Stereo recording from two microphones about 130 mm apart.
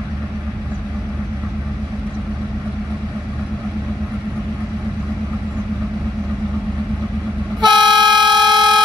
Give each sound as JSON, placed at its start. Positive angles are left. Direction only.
{"t": 7.6, "sound": "vehicle", "side_deg": -35}